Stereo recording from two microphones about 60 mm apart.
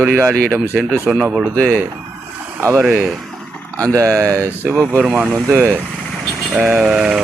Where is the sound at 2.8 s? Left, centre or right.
Right.